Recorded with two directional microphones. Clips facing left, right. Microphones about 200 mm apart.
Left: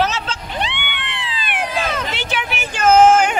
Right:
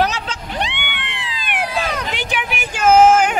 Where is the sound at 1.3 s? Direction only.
10° right (ahead or behind).